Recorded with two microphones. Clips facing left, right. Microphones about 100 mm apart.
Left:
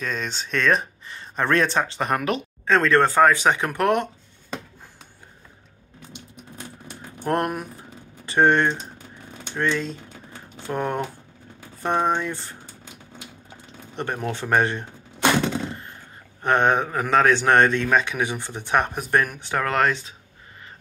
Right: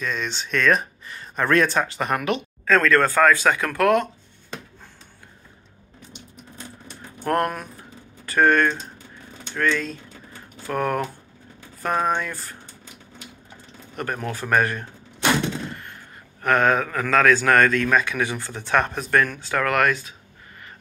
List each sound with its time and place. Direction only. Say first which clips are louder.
0.0 s a man's voice: right 1 dB; 40° left (ahead or behind)
2.6 s a man's voice: even; 25° left (ahead or behind)
7.2 s a man's voice: right 1 dB; 20° left (ahead or behind)
13.9 s a man's voice: left 1 dB; 25° left (ahead or behind)
15.7 s a sound: left 1 dB; 25° left (ahead or behind)
16.4 s a man's voice: even; 25° left (ahead or behind)